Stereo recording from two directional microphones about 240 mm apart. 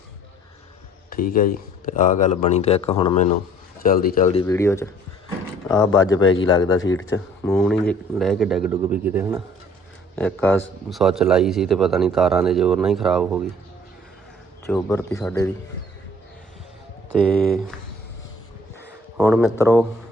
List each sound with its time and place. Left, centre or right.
1.1 s speech: left; by 3.2 s centre
3.8 s speech: left
4.4 s speech: centre
7.5 s a man's voice: centre
10.2 s a man's voice: centre
14.7 s a man's voice: centre
17.4 s a man's voice: centre
19.1 s speech: centre